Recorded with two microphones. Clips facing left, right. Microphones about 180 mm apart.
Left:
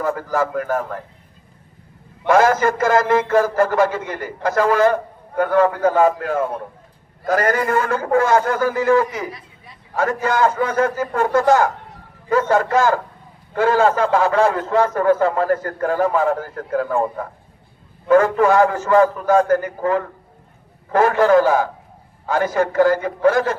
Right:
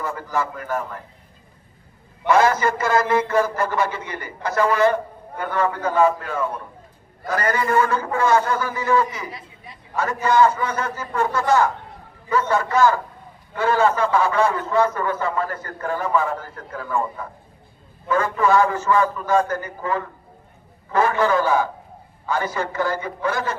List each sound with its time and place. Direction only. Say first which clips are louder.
0.0 s a man's voice: left 5 dB; 50° left (ahead or behind)
2.3 s a man's voice: left 3 dB; 50° left (ahead or behind)